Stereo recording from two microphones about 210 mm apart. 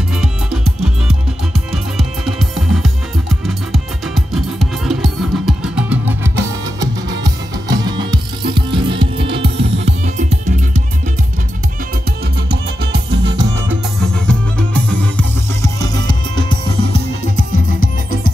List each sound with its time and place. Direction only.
0.2 s music: 5° right (ahead or behind); by 10.8 s 35° right (ahead or behind)
12.9 s music: 55° right (ahead or behind)
14.1 s music: 5° left (ahead or behind)
16.1 s music: 20° left (ahead or behind)